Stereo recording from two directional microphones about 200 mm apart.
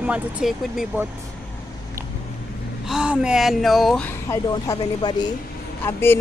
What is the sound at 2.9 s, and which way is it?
Speech, 5° right (ahead or behind).